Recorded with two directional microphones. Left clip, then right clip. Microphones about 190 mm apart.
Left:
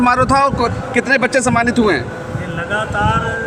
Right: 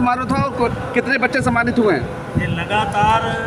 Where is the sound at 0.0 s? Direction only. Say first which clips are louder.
Left 6 dB; 40° left (ahead or behind).